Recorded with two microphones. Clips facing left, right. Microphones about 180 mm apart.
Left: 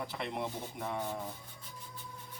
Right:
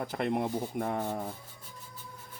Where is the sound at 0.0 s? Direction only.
50° right (ahead or behind).